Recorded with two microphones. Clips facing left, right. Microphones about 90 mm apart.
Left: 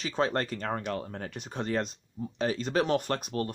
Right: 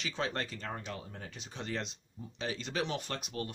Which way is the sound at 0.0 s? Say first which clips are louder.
Left 7 dB; 40° left (ahead or behind).